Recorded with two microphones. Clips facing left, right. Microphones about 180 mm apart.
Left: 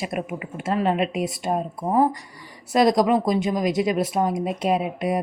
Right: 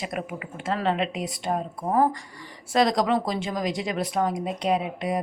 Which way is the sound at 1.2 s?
20° left (ahead or behind).